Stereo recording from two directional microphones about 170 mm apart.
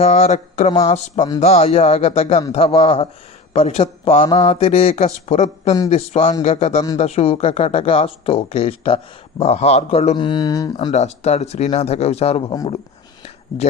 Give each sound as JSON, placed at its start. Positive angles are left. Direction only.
{"t": 0.0, "sound": "a man's voice", "side_deg": 40}
{"t": 10.2, "sound": "speech", "side_deg": 25}
{"t": 10.9, "sound": "speech", "side_deg": 40}